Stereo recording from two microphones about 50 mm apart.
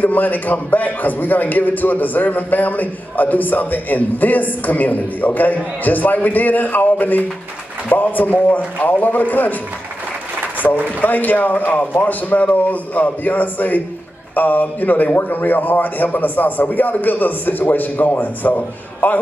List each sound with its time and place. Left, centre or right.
0.0 s a man's voice: left
10.6 s speech: left
11.0 s a man's voice: left